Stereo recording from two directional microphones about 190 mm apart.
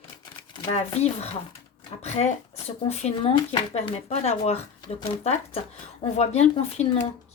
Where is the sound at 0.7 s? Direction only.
35° left (ahead or behind).